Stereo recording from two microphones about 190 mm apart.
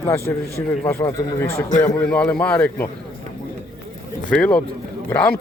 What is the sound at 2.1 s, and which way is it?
Speech, 5° left (ahead or behind).